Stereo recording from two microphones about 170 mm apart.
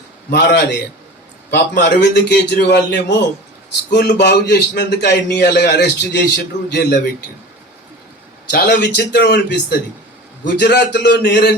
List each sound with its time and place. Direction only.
0.3 s a man's voice: 75° left (ahead or behind)
1.5 s a man's voice: 90° left; by 7.0 s 75° left (ahead or behind)
8.4 s a man's voice: 75° left (ahead or behind)